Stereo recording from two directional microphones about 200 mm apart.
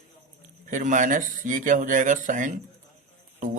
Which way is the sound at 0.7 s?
40° right (ahead or behind).